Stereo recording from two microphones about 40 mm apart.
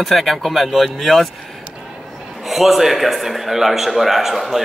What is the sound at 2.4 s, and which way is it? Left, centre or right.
A man's voice, centre.